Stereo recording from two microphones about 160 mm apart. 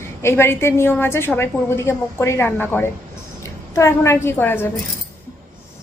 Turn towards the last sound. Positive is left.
turn(degrees=15)  # may be behind; listen again after turning